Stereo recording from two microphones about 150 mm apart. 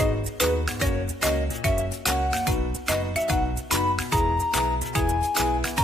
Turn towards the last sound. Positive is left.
turn(degrees=0)  # may be behind; listen again after turning